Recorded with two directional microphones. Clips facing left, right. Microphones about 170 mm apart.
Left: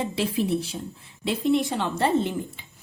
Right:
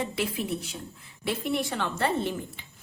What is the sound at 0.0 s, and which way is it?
A woman's voice, 30° left (ahead or behind).